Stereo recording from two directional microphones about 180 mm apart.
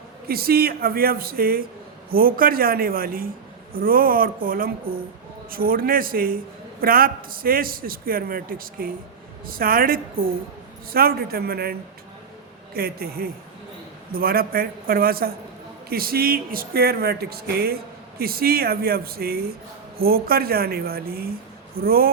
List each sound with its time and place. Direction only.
0.3 s a man's voice: 60° right (ahead or behind)